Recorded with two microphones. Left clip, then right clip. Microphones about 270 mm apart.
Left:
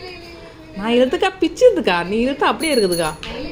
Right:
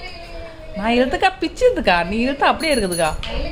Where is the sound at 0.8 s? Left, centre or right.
Centre.